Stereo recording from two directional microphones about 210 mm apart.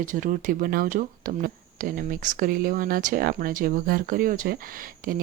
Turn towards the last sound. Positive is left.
turn(degrees=-40)  # may be behind; listen again after turning